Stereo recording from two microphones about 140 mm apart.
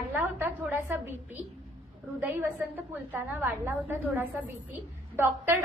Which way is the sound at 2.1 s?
15° right (ahead or behind).